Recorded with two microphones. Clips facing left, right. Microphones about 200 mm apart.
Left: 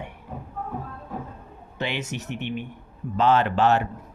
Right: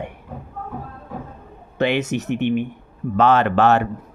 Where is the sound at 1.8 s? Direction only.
60° right (ahead or behind).